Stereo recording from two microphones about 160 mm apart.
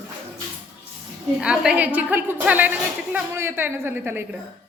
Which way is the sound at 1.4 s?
5° right (ahead or behind).